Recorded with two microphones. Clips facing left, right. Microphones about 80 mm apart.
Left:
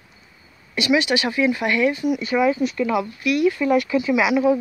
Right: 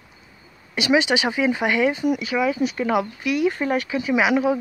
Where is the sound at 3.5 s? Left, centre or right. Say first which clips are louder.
Left 4 dB; right.